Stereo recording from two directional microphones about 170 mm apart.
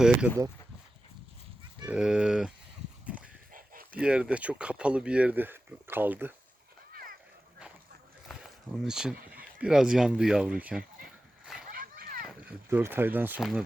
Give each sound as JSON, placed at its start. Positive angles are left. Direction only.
{"t": 1.9, "sound": "speech", "side_deg": -5}
{"t": 3.9, "sound": "speech", "side_deg": -5}
{"t": 8.3, "sound": "a sound", "side_deg": 0}
{"t": 9.1, "sound": "a sound", "side_deg": -60}
{"t": 9.6, "sound": "speech", "side_deg": -5}
{"t": 11.7, "sound": "splash", "side_deg": -60}
{"t": 12.2, "sound": "speech", "side_deg": -5}